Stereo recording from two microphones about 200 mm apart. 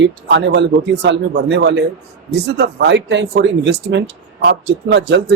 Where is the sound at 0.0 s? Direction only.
65° right (ahead or behind).